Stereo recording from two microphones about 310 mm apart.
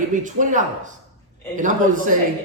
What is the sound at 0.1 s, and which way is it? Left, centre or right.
A man's voice, right.